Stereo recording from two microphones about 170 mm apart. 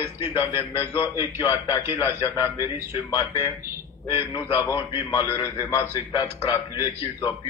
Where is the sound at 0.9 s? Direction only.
15° right (ahead or behind).